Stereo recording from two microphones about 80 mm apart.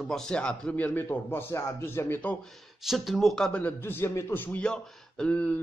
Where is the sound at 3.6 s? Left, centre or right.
Left.